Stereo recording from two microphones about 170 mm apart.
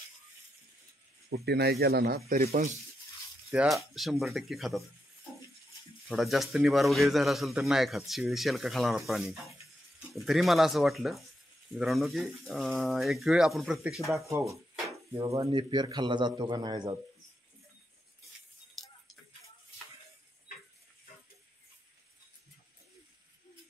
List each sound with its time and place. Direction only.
1.3 s speech: 70° right (ahead or behind); by 2.8 s 55° right (ahead or behind)
3.5 s a man's voice: centre (ahead or behind)
6.0 s a man's voice: centre (ahead or behind)
15.1 s a man's voice: 20° right (ahead or behind)
18.8 s music: centre (ahead or behind)